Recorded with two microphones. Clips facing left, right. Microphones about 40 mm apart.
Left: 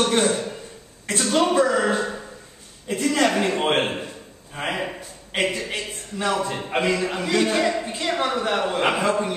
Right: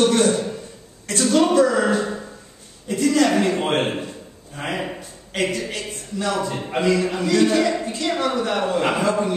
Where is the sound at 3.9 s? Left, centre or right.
Centre.